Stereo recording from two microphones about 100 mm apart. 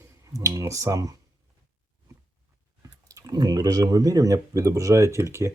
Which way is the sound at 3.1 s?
35° right (ahead or behind).